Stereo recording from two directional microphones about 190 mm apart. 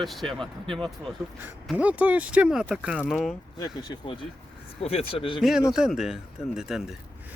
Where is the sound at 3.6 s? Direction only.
25° left (ahead or behind).